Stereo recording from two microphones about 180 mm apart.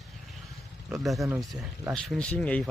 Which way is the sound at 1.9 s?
5° left (ahead or behind).